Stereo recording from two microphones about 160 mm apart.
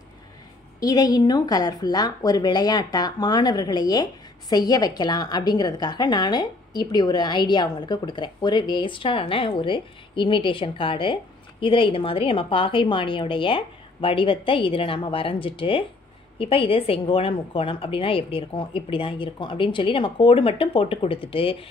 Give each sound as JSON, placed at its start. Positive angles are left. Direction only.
{"t": 0.7, "sound": "a woman's voice", "side_deg": 25}